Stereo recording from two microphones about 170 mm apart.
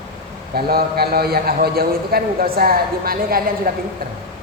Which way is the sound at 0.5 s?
65° right (ahead or behind).